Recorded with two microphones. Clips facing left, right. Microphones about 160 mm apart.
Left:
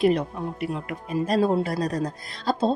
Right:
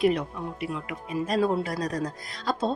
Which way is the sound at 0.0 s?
35° left (ahead or behind).